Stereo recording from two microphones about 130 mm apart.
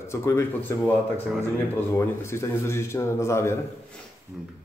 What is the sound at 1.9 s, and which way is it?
A man's voice, 20° left (ahead or behind).